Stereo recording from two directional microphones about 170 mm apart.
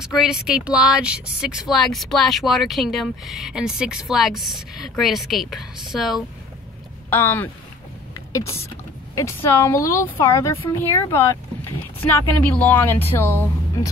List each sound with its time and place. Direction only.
0.0 s speech: 5° right (ahead or behind)
7.1 s speech: 10° left (ahead or behind)